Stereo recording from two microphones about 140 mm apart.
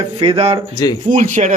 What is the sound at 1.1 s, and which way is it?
Speech, 60° right (ahead or behind).